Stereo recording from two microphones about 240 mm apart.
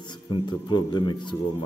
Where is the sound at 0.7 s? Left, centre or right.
Centre.